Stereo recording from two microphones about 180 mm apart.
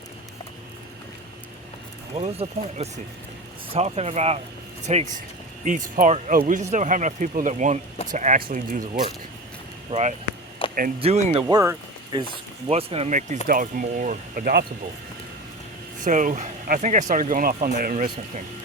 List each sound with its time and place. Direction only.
2.1 s speech: 35° right (ahead or behind)
9.9 s speech: 40° right (ahead or behind)
10.6 s a sound: 30° left (ahead or behind)
11.0 s speech: 35° right (ahead or behind)
11.4 s speech: 15° right (ahead or behind)
12.6 s speech: 35° right (ahead or behind); by 14.6 s 50° right (ahead or behind)
16.0 s speech: 45° right (ahead or behind)
17.9 s speech: 40° right (ahead or behind)